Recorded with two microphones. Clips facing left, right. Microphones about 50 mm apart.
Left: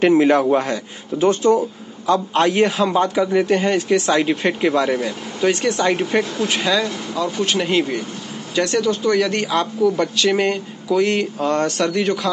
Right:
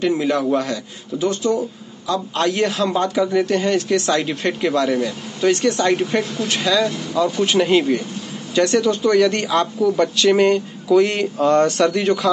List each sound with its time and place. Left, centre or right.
0.0 s a man's voice: left; by 5.1 s centre
5.4 s speech: centre